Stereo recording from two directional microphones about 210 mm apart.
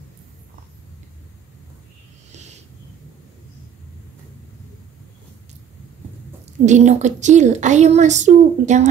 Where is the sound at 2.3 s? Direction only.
30° right (ahead or behind).